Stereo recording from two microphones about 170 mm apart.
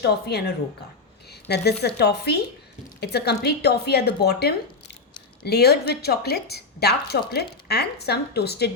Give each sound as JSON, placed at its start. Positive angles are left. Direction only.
{"t": 0.0, "sound": "a woman's voice", "side_deg": 70}